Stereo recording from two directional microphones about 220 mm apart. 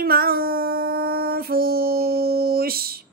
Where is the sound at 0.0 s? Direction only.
45° right (ahead or behind).